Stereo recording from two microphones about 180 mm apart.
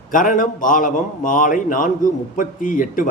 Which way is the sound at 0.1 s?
50° left (ahead or behind).